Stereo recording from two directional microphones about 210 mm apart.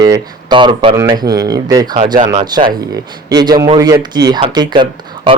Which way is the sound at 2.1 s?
35° right (ahead or behind).